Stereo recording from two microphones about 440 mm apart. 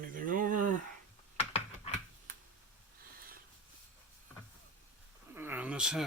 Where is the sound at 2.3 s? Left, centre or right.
Centre.